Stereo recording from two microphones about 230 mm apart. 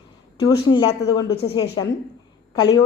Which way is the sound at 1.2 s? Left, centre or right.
Left.